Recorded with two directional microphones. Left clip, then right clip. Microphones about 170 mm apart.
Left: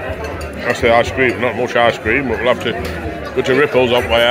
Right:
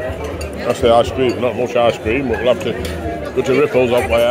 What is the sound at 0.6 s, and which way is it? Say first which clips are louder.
A man's voice: even; 10° right (ahead or behind).